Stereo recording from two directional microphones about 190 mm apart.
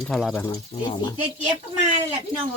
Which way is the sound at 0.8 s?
25° left (ahead or behind).